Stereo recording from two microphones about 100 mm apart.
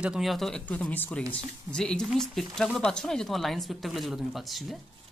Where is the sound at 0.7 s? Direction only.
15° left (ahead or behind); by 4.8 s centre (ahead or behind).